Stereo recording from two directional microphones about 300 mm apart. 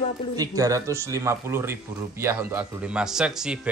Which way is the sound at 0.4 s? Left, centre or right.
Centre.